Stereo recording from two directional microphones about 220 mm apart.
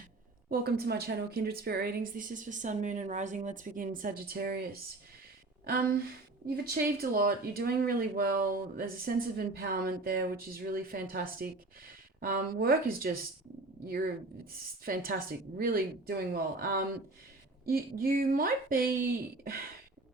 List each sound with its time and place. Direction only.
0.4 s a woman's voice: 45° right (ahead or behind)
6.7 s speech: 45° right (ahead or behind)
14.8 s a woman's voice: 40° right (ahead or behind)